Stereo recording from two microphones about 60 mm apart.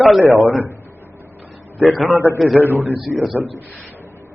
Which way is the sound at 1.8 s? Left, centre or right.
Centre.